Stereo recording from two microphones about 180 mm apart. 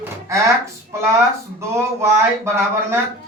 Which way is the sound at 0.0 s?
15° right (ahead or behind).